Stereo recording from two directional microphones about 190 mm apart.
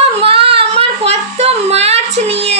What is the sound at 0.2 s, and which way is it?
Child singing, 30° right (ahead or behind).